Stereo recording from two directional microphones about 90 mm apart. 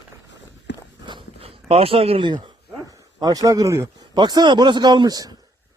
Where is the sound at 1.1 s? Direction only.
75° right (ahead or behind); by 2.5 s 60° right (ahead or behind).